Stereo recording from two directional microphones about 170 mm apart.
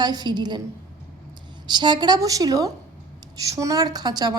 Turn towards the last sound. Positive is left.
turn(degrees=-25)  # may be behind; listen again after turning